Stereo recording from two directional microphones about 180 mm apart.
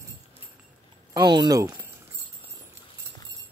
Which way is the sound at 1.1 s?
25° right (ahead or behind).